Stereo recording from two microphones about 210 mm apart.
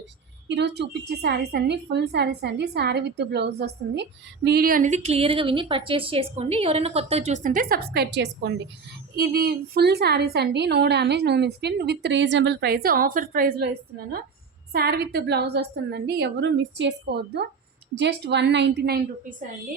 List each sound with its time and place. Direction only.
0.4 s a woman's voice: 55° right (ahead or behind)
9.1 s a woman's voice: 45° right (ahead or behind)